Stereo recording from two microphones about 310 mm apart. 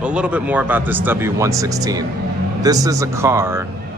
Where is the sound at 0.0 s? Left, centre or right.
Centre.